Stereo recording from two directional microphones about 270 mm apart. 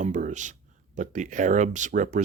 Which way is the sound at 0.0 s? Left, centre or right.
Right.